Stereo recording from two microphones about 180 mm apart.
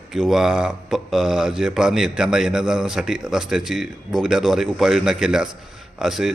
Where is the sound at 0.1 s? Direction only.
Centre (ahead or behind).